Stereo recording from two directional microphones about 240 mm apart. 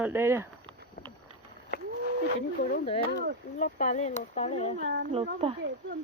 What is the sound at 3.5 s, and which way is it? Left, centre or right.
Speech, left.